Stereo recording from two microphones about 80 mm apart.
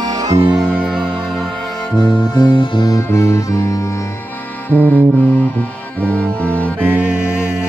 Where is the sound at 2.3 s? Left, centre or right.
Left.